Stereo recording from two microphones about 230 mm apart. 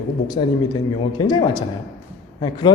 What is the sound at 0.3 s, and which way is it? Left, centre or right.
A man's voice, centre.